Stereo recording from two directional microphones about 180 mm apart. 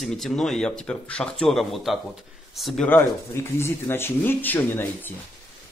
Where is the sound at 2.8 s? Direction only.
10° left (ahead or behind).